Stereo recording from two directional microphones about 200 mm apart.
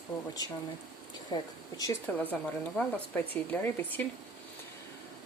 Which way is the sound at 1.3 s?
20° left (ahead or behind).